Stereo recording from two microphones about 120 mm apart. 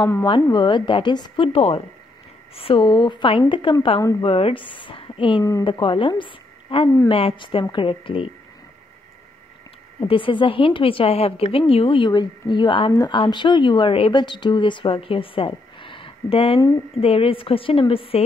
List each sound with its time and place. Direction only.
0.5 s a woman's voice: 40° left (ahead or behind)
9.9 s a woman's voice: 45° left (ahead or behind)